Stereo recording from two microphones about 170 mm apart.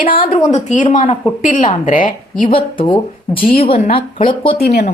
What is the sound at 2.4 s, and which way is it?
Speech, 30° left (ahead or behind).